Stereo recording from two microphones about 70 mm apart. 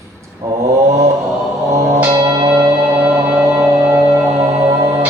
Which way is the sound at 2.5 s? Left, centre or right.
Centre.